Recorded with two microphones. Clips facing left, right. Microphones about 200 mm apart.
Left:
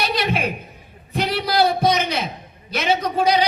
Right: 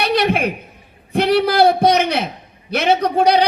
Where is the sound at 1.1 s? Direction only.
60° right (ahead or behind).